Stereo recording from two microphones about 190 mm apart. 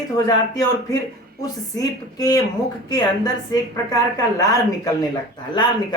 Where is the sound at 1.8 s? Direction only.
20° left (ahead or behind).